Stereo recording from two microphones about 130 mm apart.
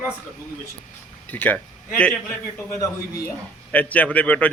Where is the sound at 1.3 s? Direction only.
10° left (ahead or behind).